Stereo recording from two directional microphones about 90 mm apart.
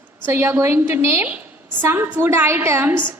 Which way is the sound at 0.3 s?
25° right (ahead or behind).